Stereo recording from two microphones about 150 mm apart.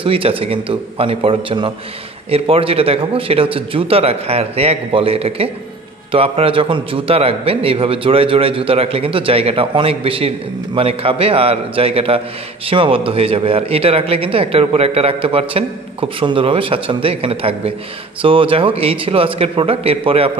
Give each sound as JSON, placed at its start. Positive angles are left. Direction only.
{"t": 0.0, "sound": "a man's voice", "side_deg": -35}